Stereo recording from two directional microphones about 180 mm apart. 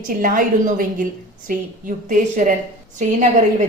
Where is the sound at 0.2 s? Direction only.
45° right (ahead or behind).